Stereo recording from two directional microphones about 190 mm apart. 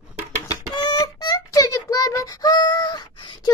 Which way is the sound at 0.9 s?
20° left (ahead or behind).